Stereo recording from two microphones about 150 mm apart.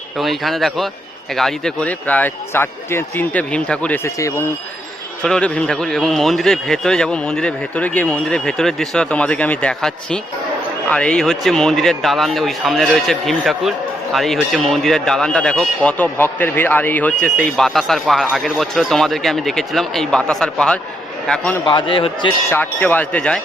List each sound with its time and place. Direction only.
0.2 s speech: centre (ahead or behind); by 4.4 s 20° left (ahead or behind)
5.2 s speech: 5° left (ahead or behind)
21.6 s speech: 30° left (ahead or behind)
22.4 s speech: 15° left (ahead or behind)